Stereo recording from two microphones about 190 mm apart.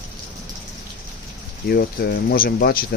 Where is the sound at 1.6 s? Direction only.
55° left (ahead or behind).